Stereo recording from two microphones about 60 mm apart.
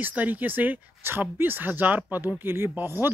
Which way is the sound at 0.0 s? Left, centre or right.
Right.